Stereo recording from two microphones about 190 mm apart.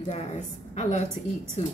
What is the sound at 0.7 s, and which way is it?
Speech, 40° left (ahead or behind).